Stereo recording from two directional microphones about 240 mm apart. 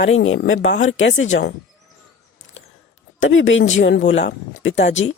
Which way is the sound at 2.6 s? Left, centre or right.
Left.